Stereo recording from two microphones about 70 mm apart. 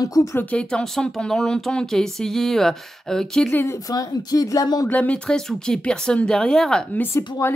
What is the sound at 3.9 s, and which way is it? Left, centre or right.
Speech, left.